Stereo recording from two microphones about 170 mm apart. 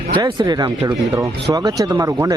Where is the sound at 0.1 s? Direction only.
25° right (ahead or behind).